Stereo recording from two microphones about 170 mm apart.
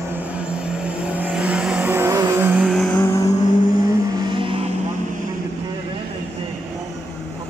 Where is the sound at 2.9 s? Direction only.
15° left (ahead or behind).